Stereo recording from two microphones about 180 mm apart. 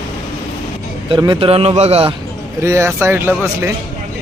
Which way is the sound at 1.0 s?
25° right (ahead or behind).